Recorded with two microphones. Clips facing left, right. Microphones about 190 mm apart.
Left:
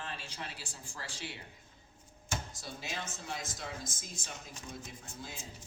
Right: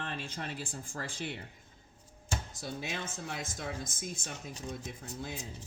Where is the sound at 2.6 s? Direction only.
55° right (ahead or behind).